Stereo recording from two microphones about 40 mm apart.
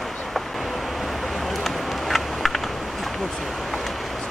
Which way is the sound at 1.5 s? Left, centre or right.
Centre.